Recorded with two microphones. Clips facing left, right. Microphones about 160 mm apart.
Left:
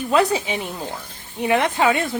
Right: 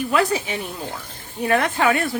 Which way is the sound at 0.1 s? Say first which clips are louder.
Left 4 dB; 20° left (ahead or behind).